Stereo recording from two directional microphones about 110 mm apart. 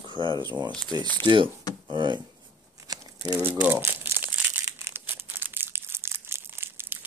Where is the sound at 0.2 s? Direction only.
45° right (ahead or behind).